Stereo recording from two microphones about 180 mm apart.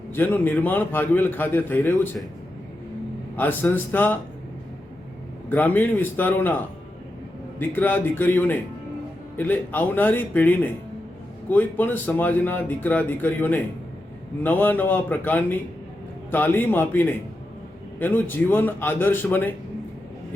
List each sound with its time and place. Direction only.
0.1 s a man's voice: 10° left (ahead or behind)
3.3 s a man's voice: 10° left (ahead or behind)
5.5 s a man's voice: 10° left (ahead or behind)
7.6 s a man's voice: 10° left (ahead or behind)